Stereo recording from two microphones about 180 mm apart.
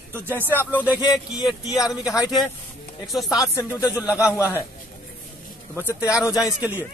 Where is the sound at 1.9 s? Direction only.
Centre (ahead or behind).